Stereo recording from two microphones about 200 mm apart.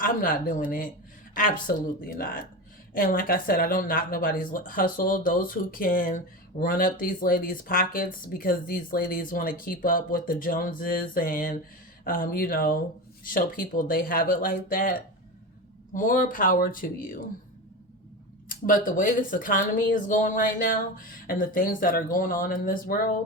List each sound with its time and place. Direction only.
0.0 s speech: 45° left (ahead or behind)
18.4 s speech: 45° left (ahead or behind)